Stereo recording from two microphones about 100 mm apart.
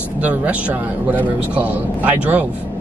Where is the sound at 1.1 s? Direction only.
15° right (ahead or behind).